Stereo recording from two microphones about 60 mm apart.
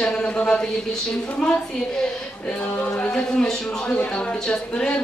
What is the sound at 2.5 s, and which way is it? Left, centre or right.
A man's voice, left.